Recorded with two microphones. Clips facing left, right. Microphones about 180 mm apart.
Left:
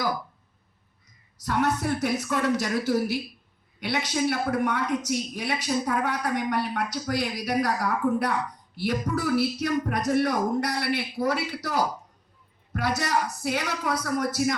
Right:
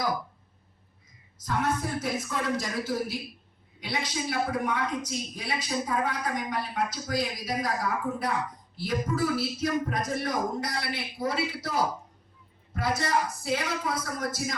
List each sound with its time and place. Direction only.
1.4 s a man's voice: 70° left (ahead or behind)